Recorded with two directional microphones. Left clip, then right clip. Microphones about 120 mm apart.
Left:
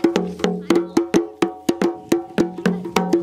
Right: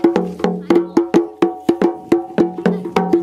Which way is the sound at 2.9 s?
40° left (ahead or behind).